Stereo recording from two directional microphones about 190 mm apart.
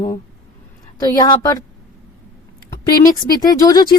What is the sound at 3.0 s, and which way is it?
Speech, 20° left (ahead or behind).